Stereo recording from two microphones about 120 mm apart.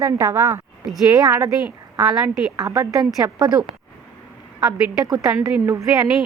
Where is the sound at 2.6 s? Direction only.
30° right (ahead or behind).